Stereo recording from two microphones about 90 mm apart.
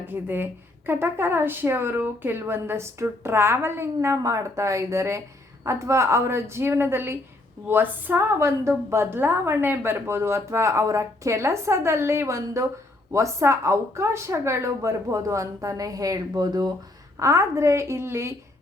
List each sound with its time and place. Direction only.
0.0 s speech: 20° right (ahead or behind)
8.4 s a woman's voice: 30° right (ahead or behind); by 16.7 s 45° right (ahead or behind)
17.2 s a woman's voice: 35° right (ahead or behind)